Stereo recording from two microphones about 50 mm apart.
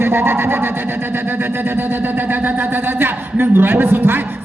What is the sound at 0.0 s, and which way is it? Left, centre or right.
Speech, right.